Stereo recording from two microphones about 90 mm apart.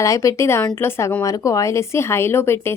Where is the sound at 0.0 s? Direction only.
35° left (ahead or behind).